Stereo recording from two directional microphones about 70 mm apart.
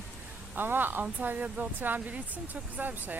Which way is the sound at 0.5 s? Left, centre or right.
Right.